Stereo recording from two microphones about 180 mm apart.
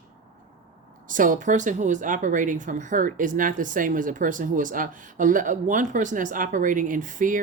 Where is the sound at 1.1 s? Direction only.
50° right (ahead or behind).